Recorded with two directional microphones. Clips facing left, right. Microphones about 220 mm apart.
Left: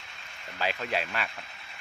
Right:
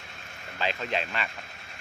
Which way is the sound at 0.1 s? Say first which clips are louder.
Right 4 dB; 45° right (ahead or behind).